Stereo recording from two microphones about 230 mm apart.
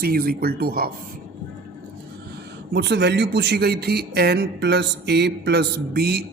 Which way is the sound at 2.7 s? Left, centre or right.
Right.